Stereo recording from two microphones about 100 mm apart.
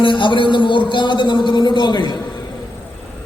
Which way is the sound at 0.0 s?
55° left (ahead or behind).